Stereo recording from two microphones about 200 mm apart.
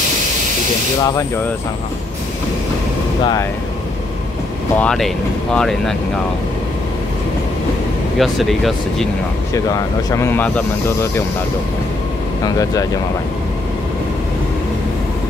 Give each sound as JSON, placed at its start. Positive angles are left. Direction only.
{"t": 1.0, "sound": "speech", "side_deg": 15}
{"t": 4.7, "sound": "speech", "side_deg": 5}
{"t": 8.2, "sound": "speech", "side_deg": 0}
{"t": 9.5, "sound": "speech", "side_deg": 15}